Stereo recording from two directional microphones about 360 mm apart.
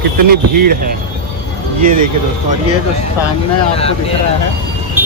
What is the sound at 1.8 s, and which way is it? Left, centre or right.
Speech, right.